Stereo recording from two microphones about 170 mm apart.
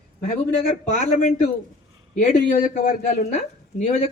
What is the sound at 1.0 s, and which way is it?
A man's voice, 45° left (ahead or behind).